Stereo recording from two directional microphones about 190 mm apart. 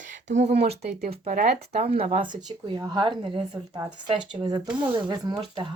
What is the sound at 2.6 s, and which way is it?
Speech, 25° right (ahead or behind).